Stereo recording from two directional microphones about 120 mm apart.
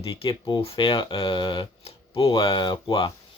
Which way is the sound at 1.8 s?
55° left (ahead or behind).